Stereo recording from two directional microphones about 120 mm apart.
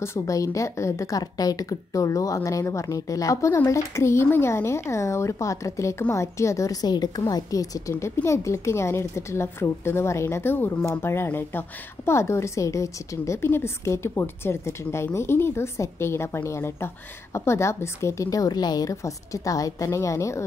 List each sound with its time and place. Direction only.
0.0 s a woman's voice: 25° left (ahead or behind)